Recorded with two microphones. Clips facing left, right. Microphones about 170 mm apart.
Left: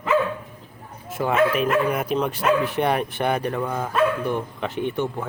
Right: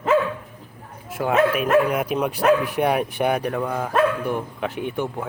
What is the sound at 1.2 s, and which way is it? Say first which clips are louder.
Speech: right 1 dB; centre (ahead or behind).